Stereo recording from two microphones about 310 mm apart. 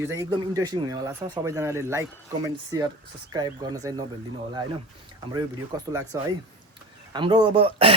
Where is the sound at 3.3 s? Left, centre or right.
Centre.